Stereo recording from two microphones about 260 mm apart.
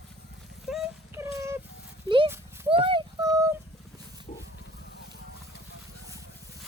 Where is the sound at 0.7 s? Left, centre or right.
Centre.